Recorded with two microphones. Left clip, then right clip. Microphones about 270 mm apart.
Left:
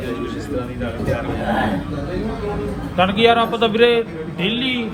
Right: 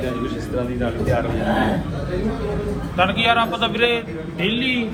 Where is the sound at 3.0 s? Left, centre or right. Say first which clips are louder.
Left 3 dB; left.